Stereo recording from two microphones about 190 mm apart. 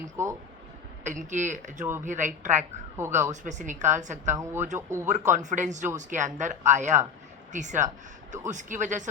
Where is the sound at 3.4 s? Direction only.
40° right (ahead or behind).